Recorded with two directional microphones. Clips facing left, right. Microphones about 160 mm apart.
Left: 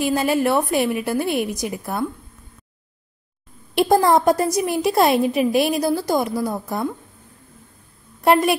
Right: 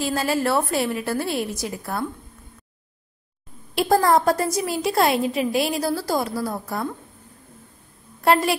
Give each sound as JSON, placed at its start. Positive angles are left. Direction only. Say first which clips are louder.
{"t": 0.0, "sound": "a woman's voice", "louder": "left 4 dB", "side_deg": 15}
{"t": 3.7, "sound": "a woman's voice", "louder": "left 2 dB", "side_deg": 20}
{"t": 8.2, "sound": "a woman's voice", "louder": "left 3 dB", "side_deg": 20}